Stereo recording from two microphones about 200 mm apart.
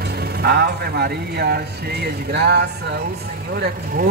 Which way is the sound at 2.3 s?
55° right (ahead or behind).